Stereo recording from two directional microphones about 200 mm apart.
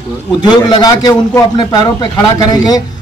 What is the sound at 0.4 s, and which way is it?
A man's voice, 20° left (ahead or behind).